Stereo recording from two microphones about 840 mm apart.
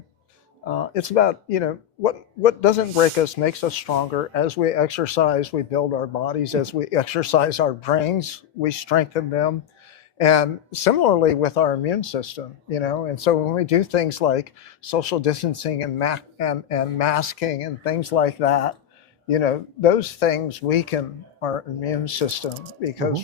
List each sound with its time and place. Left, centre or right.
0.6 s speech: left